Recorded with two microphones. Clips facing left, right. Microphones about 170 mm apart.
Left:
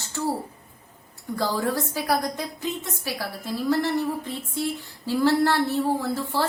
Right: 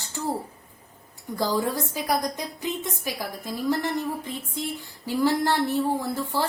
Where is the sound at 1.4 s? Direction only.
15° right (ahead or behind).